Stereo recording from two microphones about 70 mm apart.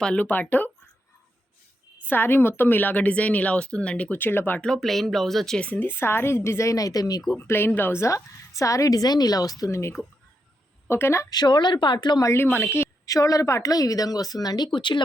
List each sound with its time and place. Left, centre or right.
0.2 s a woman's voice: left
2.0 s a woman's voice: left
4.2 s a woman's voice: left
4.6 s speech: centre
5.5 s speech: left
6.7 s speech: left
7.3 s speech: left
8.0 s speech: left
9.6 s a woman's voice: left
11.3 s speech: left
12.4 s a woman's voice: left
13.1 s speech: left